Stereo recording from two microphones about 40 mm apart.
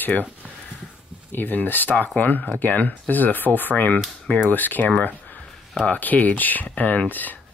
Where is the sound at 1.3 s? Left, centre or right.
Left.